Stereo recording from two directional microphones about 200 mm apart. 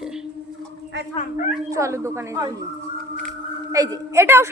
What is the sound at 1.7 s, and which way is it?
Speech, 15° right (ahead or behind).